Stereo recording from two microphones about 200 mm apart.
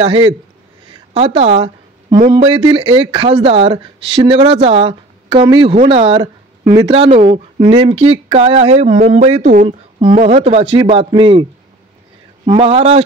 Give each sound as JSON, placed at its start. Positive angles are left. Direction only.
{"t": 0.0, "sound": "a woman's voice", "side_deg": -25}
{"t": 12.4, "sound": "speech", "side_deg": -30}